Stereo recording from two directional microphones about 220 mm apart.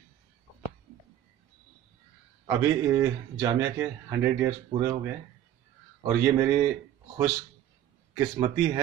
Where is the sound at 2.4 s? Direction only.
10° right (ahead or behind).